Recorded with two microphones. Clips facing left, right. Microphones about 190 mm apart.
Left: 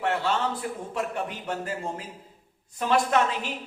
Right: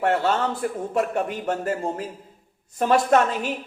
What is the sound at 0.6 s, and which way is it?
A woman's voice, 50° right (ahead or behind).